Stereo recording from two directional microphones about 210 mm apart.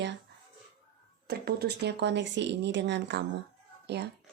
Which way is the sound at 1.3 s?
50° right (ahead or behind).